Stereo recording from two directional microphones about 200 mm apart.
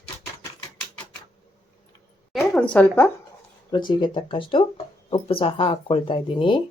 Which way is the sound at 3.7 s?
25° left (ahead or behind).